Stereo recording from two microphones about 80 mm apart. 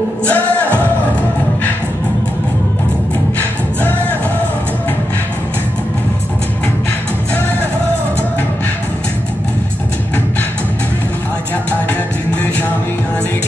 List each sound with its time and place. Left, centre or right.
0.2 s music: centre
3.3 s singing: left